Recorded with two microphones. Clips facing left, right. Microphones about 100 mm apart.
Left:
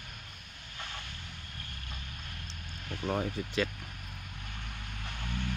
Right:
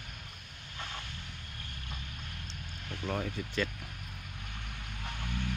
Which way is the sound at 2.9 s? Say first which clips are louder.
Left 3 dB; 15° left (ahead or behind).